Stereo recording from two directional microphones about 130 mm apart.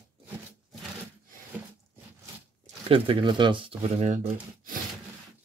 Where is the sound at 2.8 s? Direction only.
40° right (ahead or behind).